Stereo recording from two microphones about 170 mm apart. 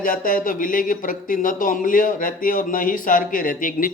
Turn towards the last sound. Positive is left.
turn(degrees=55)  # may be behind; listen again after turning